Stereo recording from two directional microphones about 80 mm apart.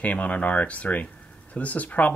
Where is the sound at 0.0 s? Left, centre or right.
Centre.